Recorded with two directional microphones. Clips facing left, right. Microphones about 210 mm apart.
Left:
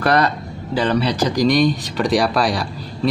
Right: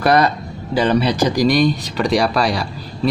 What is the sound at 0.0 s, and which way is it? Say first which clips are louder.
Speech: right 2 dB; 10° right (ahead or behind).